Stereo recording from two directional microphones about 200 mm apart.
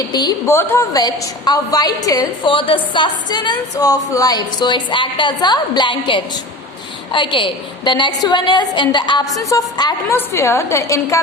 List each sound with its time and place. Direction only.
0.1 s a woman's voice: 20° left (ahead or behind)